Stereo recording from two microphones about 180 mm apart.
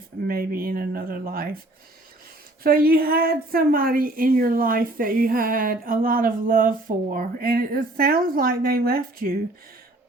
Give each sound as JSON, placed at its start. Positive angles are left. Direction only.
{"t": 0.3, "sound": "a woman's voice", "side_deg": -55}
{"t": 2.6, "sound": "a woman's voice", "side_deg": -55}